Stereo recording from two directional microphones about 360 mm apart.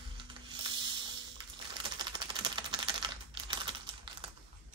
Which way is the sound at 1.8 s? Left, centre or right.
Centre.